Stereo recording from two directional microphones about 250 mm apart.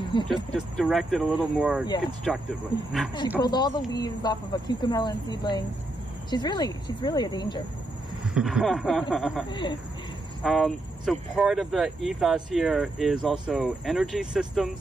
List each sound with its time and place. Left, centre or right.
0.3 s speech: centre
3.3 s speech: centre
8.4 s speech: centre
9.5 s speech: centre
10.4 s speech: centre